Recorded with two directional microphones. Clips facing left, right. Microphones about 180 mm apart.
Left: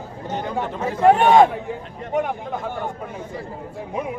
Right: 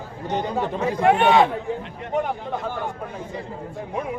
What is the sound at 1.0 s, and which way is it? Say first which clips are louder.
Speech: left 4 dB; 40° left (ahead or behind).